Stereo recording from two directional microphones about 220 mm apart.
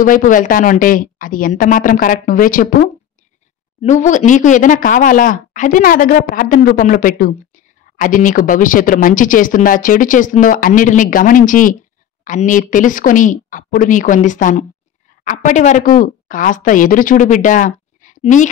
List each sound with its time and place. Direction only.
0.0 s speech: 35° left (ahead or behind)